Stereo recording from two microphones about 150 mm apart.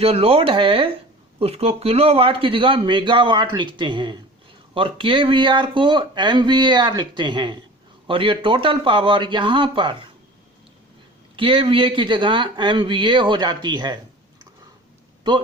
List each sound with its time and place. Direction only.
0.0 s speech: 40° right (ahead or behind)
11.3 s speech: 35° right (ahead or behind)